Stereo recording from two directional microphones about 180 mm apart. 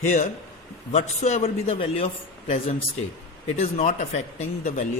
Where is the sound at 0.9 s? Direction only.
40° left (ahead or behind).